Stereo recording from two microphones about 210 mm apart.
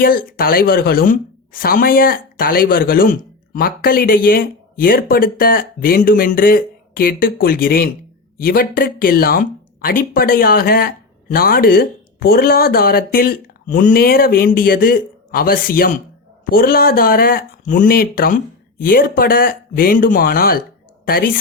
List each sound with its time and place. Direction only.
0.0 s a woman's voice: 45° left (ahead or behind)